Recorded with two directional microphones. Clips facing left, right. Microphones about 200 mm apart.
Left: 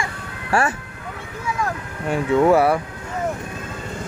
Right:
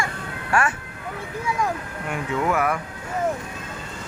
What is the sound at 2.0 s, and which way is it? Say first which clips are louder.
Mantra: left 9 dB; 30° left (ahead or behind).